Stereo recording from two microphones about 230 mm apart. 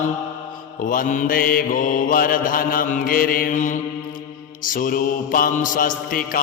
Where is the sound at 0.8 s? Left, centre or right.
Left.